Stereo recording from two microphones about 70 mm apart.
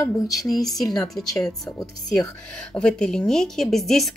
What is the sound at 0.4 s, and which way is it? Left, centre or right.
Speech, centre.